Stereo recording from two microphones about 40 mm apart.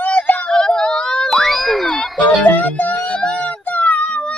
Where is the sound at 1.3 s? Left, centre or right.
Centre.